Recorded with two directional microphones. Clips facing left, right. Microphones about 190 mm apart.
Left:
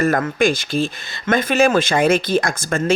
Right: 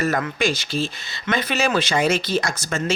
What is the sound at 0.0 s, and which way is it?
Speech, 50° left (ahead or behind).